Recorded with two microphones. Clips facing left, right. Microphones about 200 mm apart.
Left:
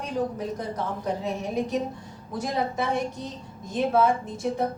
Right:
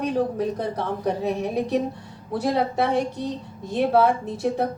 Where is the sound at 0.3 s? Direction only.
65° right (ahead or behind).